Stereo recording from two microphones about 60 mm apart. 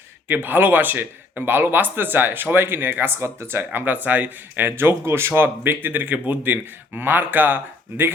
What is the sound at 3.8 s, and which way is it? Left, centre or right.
Speech, right.